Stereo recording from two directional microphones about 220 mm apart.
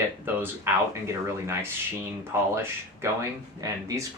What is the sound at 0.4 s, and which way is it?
Speech, 10° right (ahead or behind).